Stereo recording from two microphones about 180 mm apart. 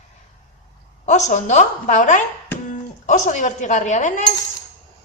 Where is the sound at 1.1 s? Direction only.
40° left (ahead or behind).